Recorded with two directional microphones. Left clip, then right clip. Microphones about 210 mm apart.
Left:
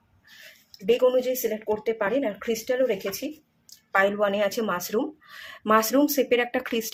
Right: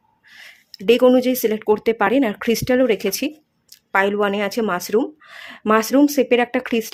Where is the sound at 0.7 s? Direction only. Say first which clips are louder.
Right 7 dB; 50° right (ahead or behind).